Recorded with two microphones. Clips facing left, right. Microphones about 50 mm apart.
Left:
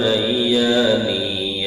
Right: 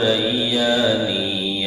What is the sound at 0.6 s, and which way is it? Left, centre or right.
Mantra, centre.